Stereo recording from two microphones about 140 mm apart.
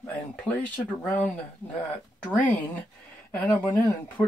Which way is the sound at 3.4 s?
15° left (ahead or behind).